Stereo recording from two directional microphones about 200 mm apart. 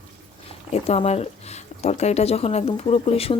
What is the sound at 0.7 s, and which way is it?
Speech, 30° left (ahead or behind).